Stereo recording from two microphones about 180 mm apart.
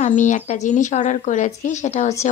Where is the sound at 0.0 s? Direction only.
45° left (ahead or behind).